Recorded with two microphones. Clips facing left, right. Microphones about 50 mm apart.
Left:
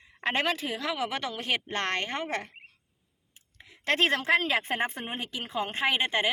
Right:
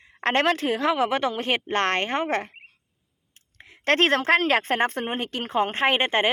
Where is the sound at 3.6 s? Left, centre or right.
Right.